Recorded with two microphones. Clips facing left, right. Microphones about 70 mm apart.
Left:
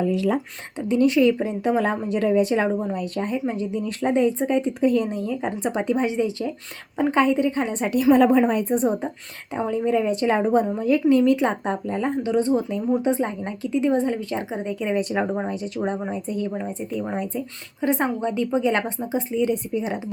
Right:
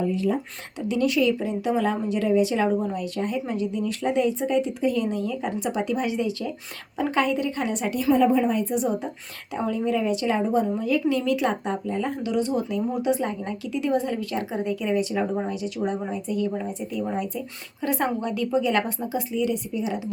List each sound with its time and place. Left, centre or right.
0.0 s speech: left
0.9 s speech: left
8.1 s a woman's voice: left
9.6 s a woman's voice: left